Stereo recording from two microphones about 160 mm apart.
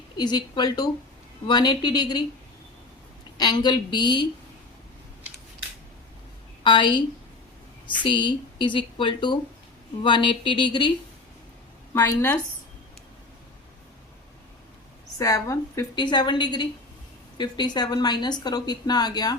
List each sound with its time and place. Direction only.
0.2 s speech: 25° left (ahead or behind)
3.3 s speech: 25° left (ahead or behind)
6.7 s speech: 30° left (ahead or behind)
8.0 s a woman's voice: 30° left (ahead or behind)
11.9 s a woman's voice: 15° left (ahead or behind)
15.2 s speech: 20° left (ahead or behind)